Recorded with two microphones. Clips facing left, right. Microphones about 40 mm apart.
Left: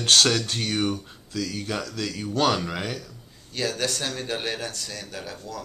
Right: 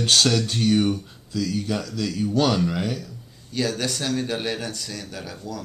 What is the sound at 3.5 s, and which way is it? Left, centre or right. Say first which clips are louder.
Speech: right 2 dB; centre.